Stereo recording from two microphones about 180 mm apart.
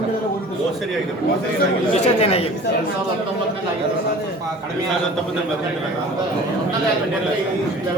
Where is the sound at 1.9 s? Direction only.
35° left (ahead or behind).